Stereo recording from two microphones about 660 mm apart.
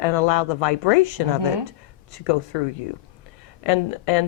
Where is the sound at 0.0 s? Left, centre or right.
Left.